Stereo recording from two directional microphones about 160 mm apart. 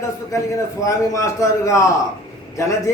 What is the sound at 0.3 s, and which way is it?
A man's voice, 20° left (ahead or behind).